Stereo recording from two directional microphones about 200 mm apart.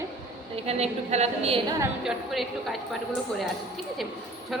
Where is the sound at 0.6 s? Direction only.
30° right (ahead or behind).